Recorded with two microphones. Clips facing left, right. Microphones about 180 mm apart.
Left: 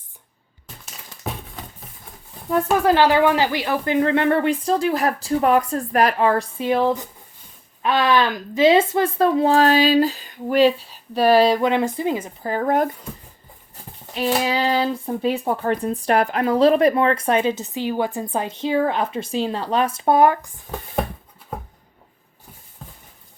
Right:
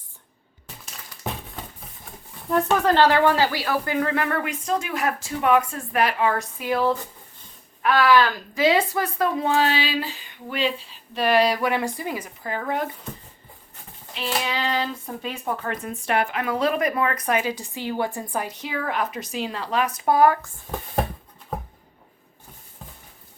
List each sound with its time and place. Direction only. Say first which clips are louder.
2.5 s speech: left 2 dB; 5° left (ahead or behind); by 12.9 s 45° left (ahead or behind)
14.4 s speech: left 6 dB; 35° left (ahead or behind)
22.8 s clip-clop: left 2 dB; centre (ahead or behind)